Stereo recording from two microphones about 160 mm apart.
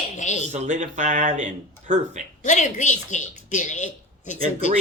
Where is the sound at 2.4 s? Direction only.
50° left (ahead or behind).